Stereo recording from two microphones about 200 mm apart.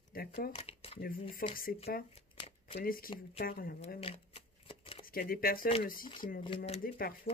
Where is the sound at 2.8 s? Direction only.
45° left (ahead or behind).